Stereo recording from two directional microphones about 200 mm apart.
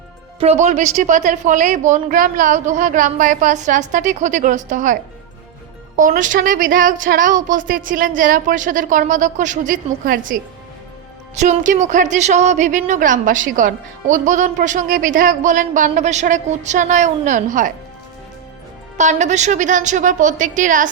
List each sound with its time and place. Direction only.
0.3 s a woman's voice: 30° right (ahead or behind)
6.0 s a woman's voice: 40° right (ahead or behind)
18.9 s a woman's voice: 35° right (ahead or behind)